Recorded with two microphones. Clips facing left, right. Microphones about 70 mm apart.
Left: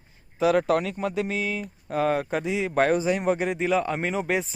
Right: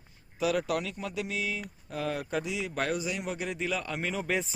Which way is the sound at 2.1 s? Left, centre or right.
Left.